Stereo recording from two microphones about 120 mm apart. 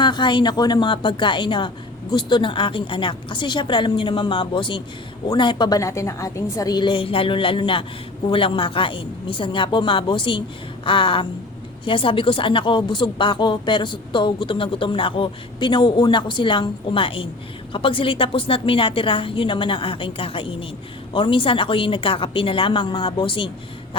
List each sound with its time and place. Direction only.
0.0 s a woman's voice: 40° left (ahead or behind)